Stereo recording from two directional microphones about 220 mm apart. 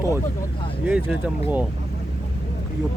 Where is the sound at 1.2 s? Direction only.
5° right (ahead or behind).